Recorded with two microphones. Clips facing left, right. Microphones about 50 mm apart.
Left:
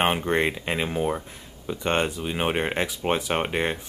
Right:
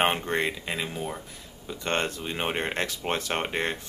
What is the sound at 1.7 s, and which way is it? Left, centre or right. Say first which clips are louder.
Speech: left 4 dB; centre.